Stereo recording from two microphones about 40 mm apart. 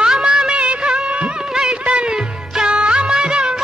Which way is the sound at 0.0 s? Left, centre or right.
Centre.